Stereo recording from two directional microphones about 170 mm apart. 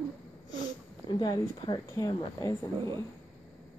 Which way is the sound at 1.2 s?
25° left (ahead or behind).